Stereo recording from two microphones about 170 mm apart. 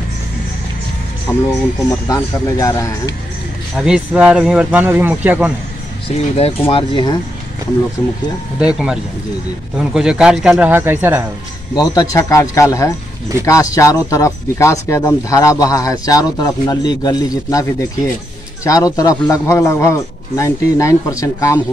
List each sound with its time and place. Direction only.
1.3 s a man's voice: 20° left (ahead or behind)
3.7 s speech: 5° right (ahead or behind)
6.7 s a man's voice: 30° left (ahead or behind)
8.5 s speech: 5° right (ahead or behind)
11.7 s a man's voice: 20° left (ahead or behind)